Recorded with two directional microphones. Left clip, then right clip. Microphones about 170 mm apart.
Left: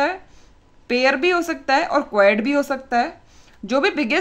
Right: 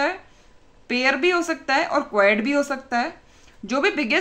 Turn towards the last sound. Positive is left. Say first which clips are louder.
# left 2 dB
turn(degrees=30)  # may be behind; listen again after turning